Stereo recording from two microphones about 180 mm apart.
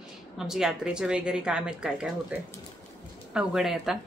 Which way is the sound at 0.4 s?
5° right (ahead or behind).